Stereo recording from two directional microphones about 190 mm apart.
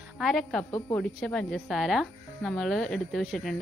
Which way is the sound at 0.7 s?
15° left (ahead or behind).